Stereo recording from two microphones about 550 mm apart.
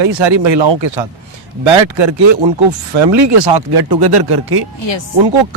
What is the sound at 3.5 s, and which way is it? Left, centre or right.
Speech, right.